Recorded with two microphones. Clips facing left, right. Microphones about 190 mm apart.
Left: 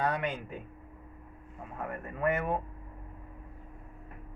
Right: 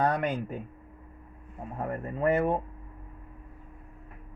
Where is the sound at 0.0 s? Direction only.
45° right (ahead or behind).